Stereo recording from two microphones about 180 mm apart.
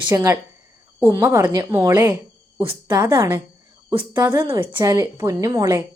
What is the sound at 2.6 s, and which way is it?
Speech, 25° right (ahead or behind).